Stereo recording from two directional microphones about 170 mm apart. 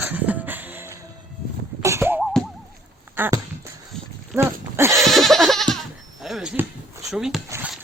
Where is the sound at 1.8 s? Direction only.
15° right (ahead or behind).